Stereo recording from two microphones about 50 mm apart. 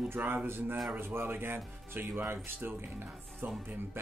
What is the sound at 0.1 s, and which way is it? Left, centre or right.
Speech, right.